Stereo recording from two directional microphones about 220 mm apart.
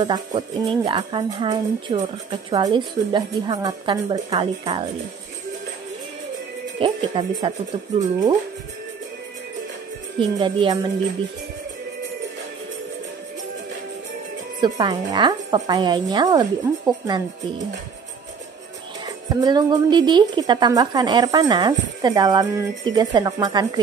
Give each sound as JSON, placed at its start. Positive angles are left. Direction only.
{"t": 0.0, "sound": "speech", "side_deg": -20}
{"t": 6.8, "sound": "speech", "side_deg": -25}
{"t": 10.1, "sound": "speech", "side_deg": -20}
{"t": 14.6, "sound": "speech", "side_deg": -20}
{"t": 19.0, "sound": "speech", "side_deg": -20}